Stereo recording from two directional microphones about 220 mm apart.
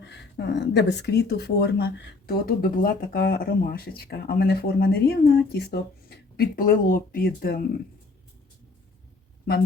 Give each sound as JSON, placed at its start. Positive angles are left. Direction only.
{"t": 0.0, "sound": "speech", "side_deg": 50}